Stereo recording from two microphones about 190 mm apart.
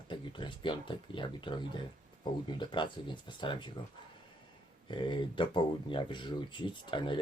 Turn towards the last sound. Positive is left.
turn(degrees=25)  # may be behind; listen again after turning